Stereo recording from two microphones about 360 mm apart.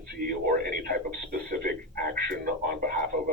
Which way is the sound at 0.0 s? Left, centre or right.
Right.